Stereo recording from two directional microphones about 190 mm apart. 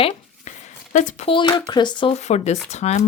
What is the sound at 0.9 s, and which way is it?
Speech, 35° left (ahead or behind).